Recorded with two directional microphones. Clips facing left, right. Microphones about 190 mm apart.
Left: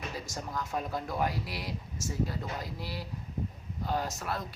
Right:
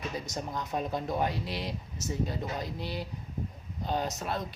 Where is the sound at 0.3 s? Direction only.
20° right (ahead or behind).